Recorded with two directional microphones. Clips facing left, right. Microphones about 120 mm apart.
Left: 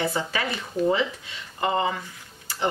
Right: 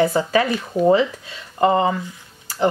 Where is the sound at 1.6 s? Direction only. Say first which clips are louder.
Right 8 dB; 40° right (ahead or behind).